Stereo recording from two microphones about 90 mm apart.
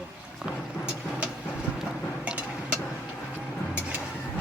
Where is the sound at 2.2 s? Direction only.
10° right (ahead or behind).